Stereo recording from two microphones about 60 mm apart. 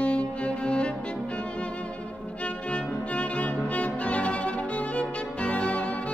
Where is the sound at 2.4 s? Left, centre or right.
Left.